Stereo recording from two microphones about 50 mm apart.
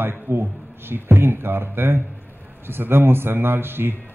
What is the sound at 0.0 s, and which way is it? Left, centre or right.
A man's voice, right.